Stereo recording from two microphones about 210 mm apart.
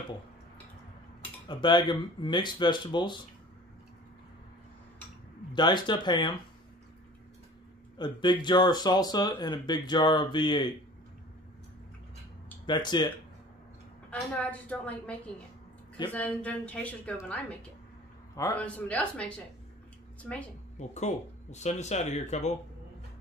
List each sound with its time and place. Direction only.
1.5 s speech: 20° left (ahead or behind)
5.5 s speech: 20° left (ahead or behind)
8.0 s speech: 20° left (ahead or behind)
12.6 s speech: 20° left (ahead or behind)
14.2 s a woman's voice: 5° left (ahead or behind)
20.9 s speech: 30° left (ahead or behind)